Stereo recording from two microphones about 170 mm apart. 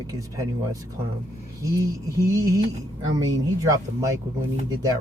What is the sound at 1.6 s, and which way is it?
Speech, 20° right (ahead or behind).